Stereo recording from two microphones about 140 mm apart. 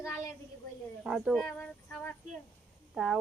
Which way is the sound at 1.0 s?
Centre (ahead or behind).